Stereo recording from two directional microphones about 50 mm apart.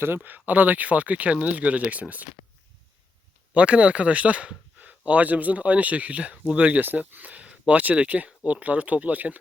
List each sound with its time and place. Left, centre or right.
0.2 s speech: right
3.5 s speech: right